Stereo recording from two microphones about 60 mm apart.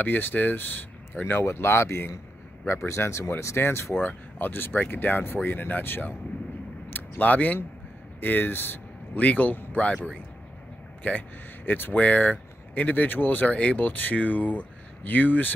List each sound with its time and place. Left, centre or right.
0.0 s speech: left
9.2 s speech: left
11.0 s speech: left
13.5 s speech: left